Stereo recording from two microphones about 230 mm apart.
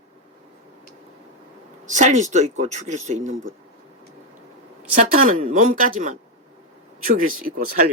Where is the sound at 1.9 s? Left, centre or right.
Right.